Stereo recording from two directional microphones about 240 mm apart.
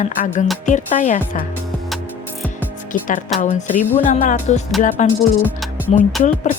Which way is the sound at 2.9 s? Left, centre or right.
Left.